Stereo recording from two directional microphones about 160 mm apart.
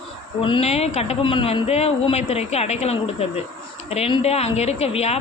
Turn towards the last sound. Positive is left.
turn(degrees=40)  # may be behind; listen again after turning